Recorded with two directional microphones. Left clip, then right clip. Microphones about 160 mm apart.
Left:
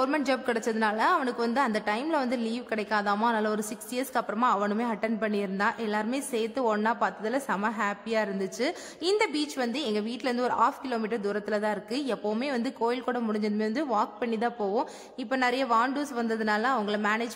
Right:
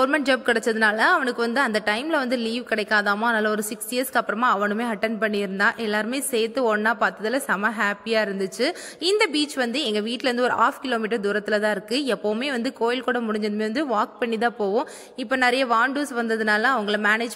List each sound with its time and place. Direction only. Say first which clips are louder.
0.0 s a woman's voice: right 7 dB; 15° right (ahead or behind)